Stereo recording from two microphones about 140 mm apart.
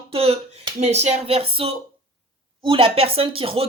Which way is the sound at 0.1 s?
45° right (ahead or behind).